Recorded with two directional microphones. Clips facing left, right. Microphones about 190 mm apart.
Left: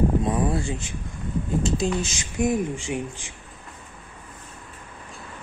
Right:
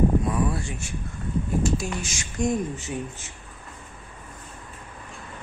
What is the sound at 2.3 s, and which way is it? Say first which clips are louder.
Speech: left 2 dB; 10° left (ahead or behind).